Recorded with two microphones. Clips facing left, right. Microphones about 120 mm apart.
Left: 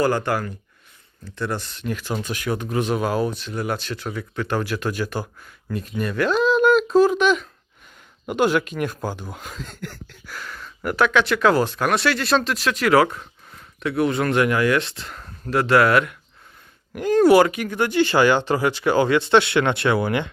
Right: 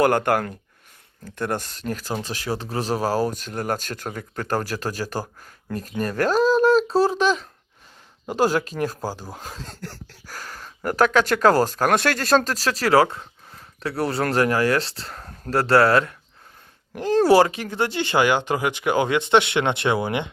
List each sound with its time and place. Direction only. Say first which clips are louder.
0.0 s speech: right 2 dB; 55° right (ahead or behind); by 5.9 s 40° right (ahead or behind)
6.0 s a sound: right 1 dB; 40° right (ahead or behind)
8.3 s speech: left 1 dB; 35° right (ahead or behind); by 20.3 s 20° right (ahead or behind)